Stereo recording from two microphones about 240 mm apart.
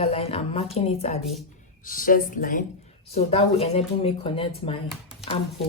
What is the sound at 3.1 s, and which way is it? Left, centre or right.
Speech, left.